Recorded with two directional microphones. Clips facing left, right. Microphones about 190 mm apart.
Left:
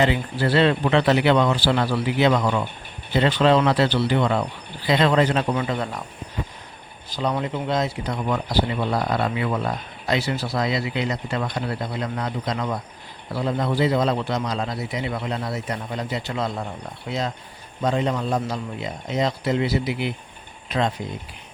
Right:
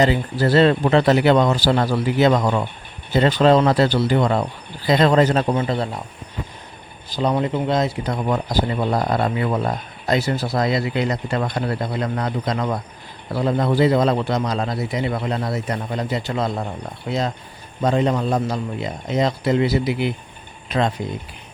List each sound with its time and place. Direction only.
0.0 s speech: 40° right (ahead or behind)
7.1 s speech: 30° right (ahead or behind)